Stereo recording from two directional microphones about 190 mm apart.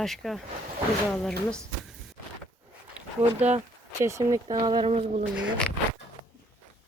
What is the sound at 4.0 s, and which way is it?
Speech, 15° right (ahead or behind).